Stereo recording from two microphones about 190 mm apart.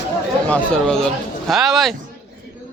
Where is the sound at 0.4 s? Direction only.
5° left (ahead or behind).